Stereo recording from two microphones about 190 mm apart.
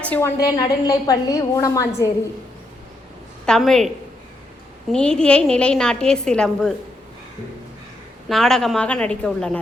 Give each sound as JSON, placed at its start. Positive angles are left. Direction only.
{"t": 0.0, "sound": "a woman's voice", "side_deg": 10}
{"t": 0.4, "sound": "a woman's voice", "side_deg": 20}
{"t": 3.4, "sound": "a woman's voice", "side_deg": 5}
{"t": 8.3, "sound": "a woman's voice", "side_deg": 0}